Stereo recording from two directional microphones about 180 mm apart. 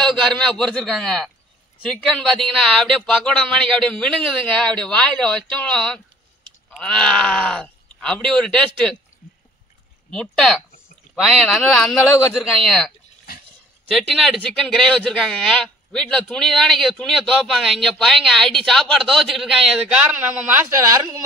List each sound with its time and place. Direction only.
0.0 s speech: centre (ahead or behind)
10.1 s speech: 5° left (ahead or behind); by 21.2 s 15° right (ahead or behind)